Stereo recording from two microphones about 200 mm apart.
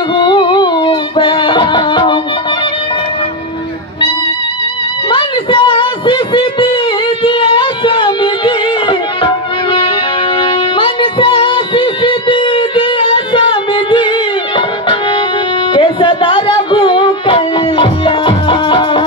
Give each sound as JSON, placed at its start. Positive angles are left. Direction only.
{"t": 0.1, "sound": "music", "side_deg": 25}
{"t": 5.1, "sound": "a sound", "side_deg": 25}
{"t": 7.2, "sound": "music", "side_deg": 25}
{"t": 15.7, "sound": "music", "side_deg": 25}